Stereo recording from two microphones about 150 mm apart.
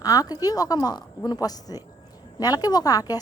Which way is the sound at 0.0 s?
25° left (ahead or behind).